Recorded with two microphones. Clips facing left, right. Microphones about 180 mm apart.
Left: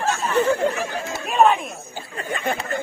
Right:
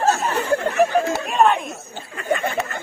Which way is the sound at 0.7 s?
60° right (ahead or behind).